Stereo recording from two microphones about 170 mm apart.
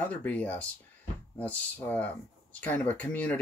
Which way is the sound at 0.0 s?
10° left (ahead or behind).